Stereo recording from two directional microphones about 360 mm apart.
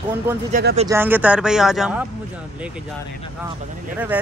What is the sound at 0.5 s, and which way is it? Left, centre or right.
Speech, right.